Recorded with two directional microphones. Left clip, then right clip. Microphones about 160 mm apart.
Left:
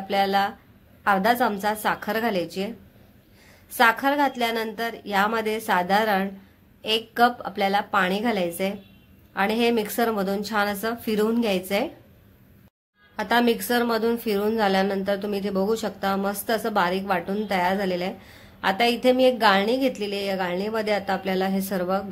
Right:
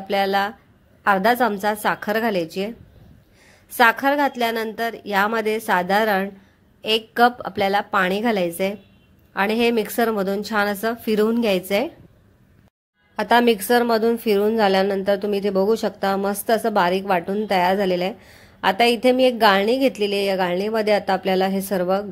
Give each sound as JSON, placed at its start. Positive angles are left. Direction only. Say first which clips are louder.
{"t": 0.1, "sound": "a woman's voice", "louder": "right 2 dB", "side_deg": -35}
{"t": 3.7, "sound": "a woman's voice", "louder": "right 3 dB", "side_deg": -35}
{"t": 13.1, "sound": "a woman's voice", "louder": "right 5 dB", "side_deg": -35}